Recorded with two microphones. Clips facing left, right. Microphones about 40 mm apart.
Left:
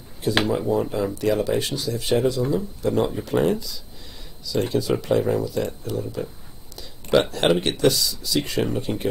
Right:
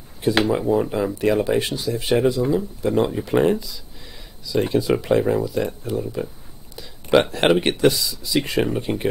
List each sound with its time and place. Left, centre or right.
0.5 s speech: centre
3.3 s speech: right